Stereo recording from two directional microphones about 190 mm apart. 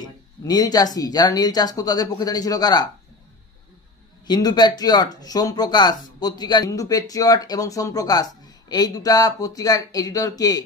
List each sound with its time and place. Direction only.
0.0 s speech: 20° left (ahead or behind)
4.3 s speech: 20° left (ahead or behind)